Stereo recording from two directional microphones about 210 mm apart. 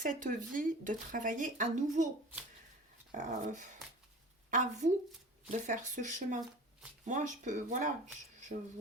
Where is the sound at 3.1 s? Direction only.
35° right (ahead or behind).